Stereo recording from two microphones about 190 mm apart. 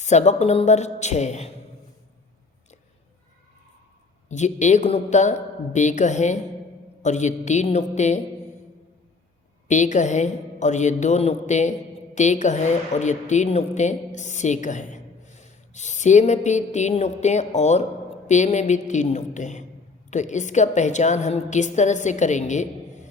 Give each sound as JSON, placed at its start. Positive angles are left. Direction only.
{"t": 0.0, "sound": "a woman's voice", "side_deg": 35}
{"t": 4.3, "sound": "a woman's voice", "side_deg": 40}
{"t": 9.6, "sound": "a woman's voice", "side_deg": 40}